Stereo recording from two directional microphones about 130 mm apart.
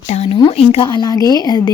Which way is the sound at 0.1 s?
45° left (ahead or behind).